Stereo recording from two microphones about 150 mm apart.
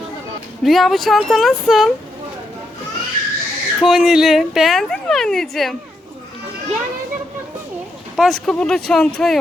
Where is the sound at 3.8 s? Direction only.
5° right (ahead or behind).